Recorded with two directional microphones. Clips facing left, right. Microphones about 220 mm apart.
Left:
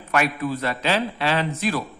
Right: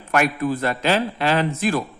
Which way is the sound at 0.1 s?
50° right (ahead or behind).